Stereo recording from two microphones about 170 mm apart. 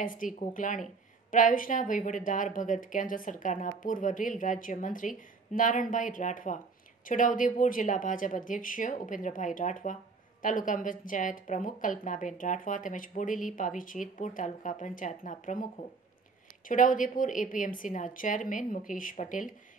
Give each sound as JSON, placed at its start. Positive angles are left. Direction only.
{"t": 0.0, "sound": "speech", "side_deg": 50}